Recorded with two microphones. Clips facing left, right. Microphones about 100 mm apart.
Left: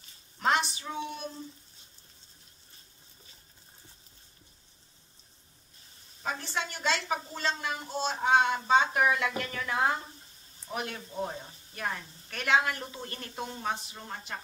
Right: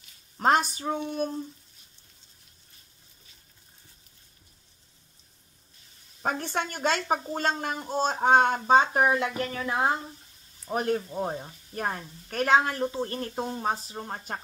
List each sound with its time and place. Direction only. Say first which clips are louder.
0.4 s a woman's voice: right 5 dB; 40° right (ahead or behind)
6.2 s a woman's voice: right 5 dB; 50° right (ahead or behind); by 9.9 s 30° right (ahead or behind)
10.7 s a woman's voice: right 9 dB; 40° right (ahead or behind)